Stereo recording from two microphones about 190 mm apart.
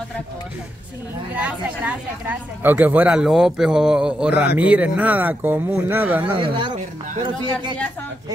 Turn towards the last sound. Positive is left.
turn(degrees=-25)  # may be behind; listen again after turning